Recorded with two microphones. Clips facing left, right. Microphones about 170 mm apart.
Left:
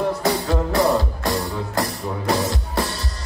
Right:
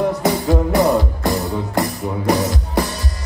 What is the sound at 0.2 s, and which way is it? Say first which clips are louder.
Music: right 4 dB; 20° right (ahead or behind).